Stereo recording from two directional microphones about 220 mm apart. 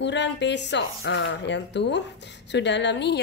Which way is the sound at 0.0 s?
50° left (ahead or behind).